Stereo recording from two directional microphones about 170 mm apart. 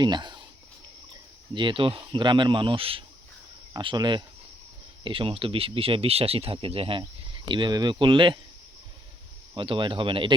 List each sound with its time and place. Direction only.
0.0 s speech: 25° right (ahead or behind)
9.6 s speech: 30° right (ahead or behind)